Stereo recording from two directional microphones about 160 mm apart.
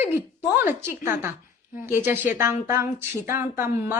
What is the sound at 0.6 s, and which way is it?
Speech, 15° right (ahead or behind).